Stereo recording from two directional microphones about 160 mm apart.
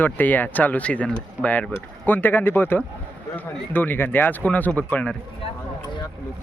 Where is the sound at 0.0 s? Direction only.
10° left (ahead or behind).